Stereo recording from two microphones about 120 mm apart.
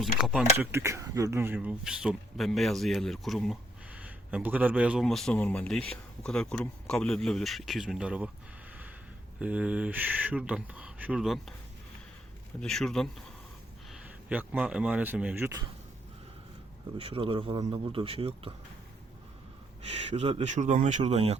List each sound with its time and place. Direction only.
0.2 s speech: 5° right (ahead or behind)
0.5 s speech: 20° right (ahead or behind)
1.5 s speech: 5° right (ahead or behind)
3.9 s speech: 10° right (ahead or behind)
5.0 s speech: 5° left (ahead or behind)
9.4 s speech: 10° right (ahead or behind)
12.5 s speech: 5° left (ahead or behind)
13.9 s speech: 5° right (ahead or behind)
17.0 s speech: 50° right (ahead or behind)
19.9 s speech: 65° right (ahead or behind)
20.5 s speech: 80° right; by 21.3 s 65° right (ahead or behind)